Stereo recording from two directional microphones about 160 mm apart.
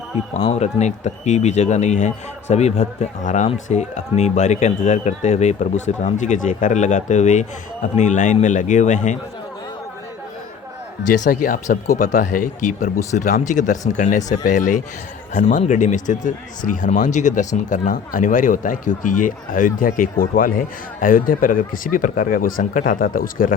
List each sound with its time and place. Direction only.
0.5 s a man's voice: 45° left (ahead or behind)
11.2 s a man's voice: 60° left (ahead or behind)